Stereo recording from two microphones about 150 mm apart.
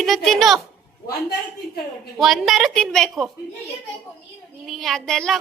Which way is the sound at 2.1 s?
Centre (ahead or behind).